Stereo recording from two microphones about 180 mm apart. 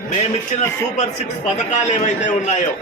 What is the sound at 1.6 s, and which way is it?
A man's voice, 40° left (ahead or behind).